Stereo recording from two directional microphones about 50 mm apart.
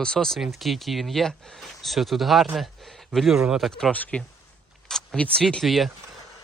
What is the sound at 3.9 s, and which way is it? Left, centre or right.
Speech, left.